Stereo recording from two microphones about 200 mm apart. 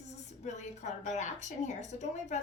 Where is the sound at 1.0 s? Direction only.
35° left (ahead or behind).